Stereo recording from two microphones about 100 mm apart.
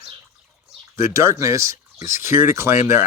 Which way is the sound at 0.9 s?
30° right (ahead or behind).